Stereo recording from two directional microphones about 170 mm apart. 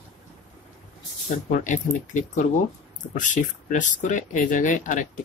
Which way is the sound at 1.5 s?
45° left (ahead or behind).